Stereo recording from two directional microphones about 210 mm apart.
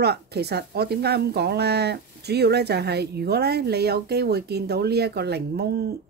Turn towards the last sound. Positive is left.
turn(degrees=-50)  # may be behind; listen again after turning